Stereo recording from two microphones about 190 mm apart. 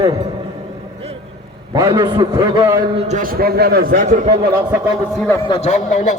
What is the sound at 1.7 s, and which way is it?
A man's voice, 20° right (ahead or behind).